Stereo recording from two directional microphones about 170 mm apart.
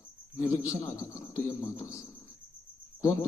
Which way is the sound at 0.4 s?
15° left (ahead or behind).